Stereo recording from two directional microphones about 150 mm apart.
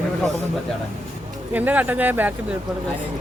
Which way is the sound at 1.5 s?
10° right (ahead or behind).